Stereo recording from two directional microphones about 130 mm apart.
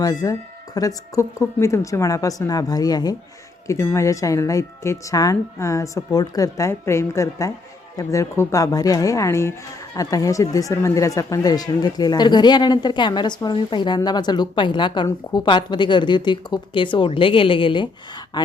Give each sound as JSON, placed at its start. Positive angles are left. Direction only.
{"t": 0.0, "sound": "speech", "side_deg": 30}